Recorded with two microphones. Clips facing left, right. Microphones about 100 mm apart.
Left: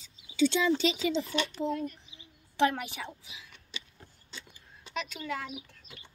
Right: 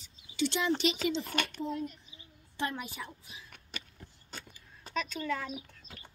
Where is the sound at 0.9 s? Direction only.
50° right (ahead or behind).